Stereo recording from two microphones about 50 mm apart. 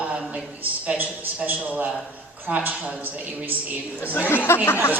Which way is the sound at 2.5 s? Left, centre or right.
Right.